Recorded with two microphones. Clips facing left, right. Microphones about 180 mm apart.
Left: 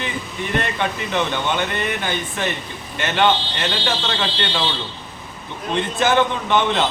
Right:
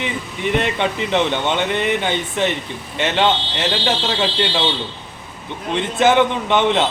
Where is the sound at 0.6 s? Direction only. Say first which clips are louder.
Right 3 dB; 20° right (ahead or behind).